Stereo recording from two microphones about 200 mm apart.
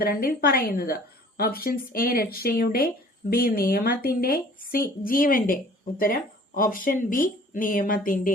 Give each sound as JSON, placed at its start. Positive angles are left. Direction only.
{"t": 0.0, "sound": "speech", "side_deg": 45}